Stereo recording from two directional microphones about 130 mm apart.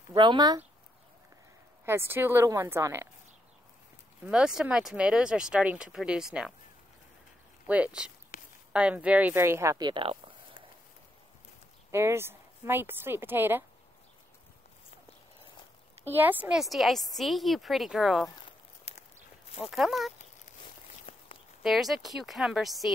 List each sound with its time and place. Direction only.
0.1 s speech: 35° right (ahead or behind)
1.9 s speech: 15° right (ahead or behind)
4.3 s speech: 5° right (ahead or behind)
7.6 s speech: 10° right (ahead or behind); by 10.3 s 40° right (ahead or behind)
11.9 s speech: 20° right (ahead or behind)
16.0 s a woman's voice: 15° right (ahead or behind)
18.9 s walk: 50° left (ahead or behind)
19.6 s a woman's voice: centre (ahead or behind)
20.6 s a sound: 50° left (ahead or behind)
21.6 s a woman's voice: centre (ahead or behind)